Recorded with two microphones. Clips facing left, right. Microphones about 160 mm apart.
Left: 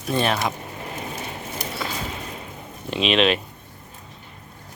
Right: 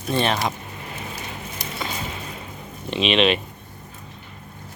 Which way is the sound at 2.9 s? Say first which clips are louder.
Right 1 dB; centre (ahead or behind).